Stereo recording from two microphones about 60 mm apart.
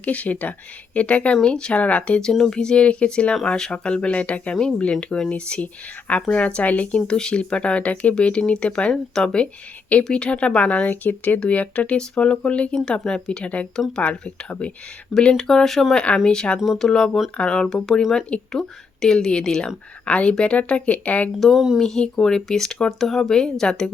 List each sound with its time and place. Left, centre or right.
0.0 s speech: left
7.1 s speech: centre
15.2 s speech: centre
21.3 s speech: centre
21.8 s speech: centre